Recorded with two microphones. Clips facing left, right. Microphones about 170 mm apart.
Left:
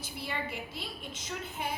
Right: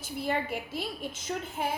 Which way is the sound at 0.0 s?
50° right (ahead or behind).